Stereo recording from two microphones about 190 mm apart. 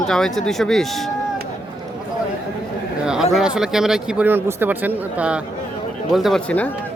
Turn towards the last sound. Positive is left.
turn(degrees=5)  # may be behind; listen again after turning